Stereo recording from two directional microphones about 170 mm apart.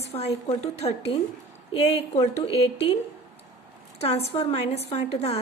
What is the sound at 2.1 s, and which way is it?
Speech, 35° left (ahead or behind).